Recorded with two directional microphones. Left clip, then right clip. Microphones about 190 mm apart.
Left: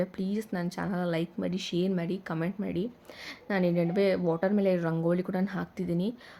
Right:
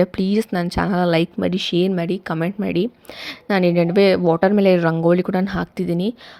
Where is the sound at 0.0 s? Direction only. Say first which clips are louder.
Right 14 dB; 45° right (ahead or behind).